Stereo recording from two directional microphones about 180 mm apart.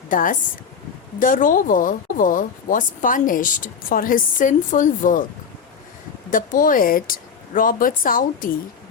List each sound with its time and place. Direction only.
0.1 s speech: 50° left (ahead or behind)
6.3 s speech: 50° left (ahead or behind)